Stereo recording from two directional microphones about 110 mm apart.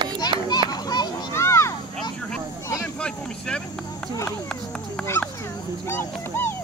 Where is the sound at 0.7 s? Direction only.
40° left (ahead or behind).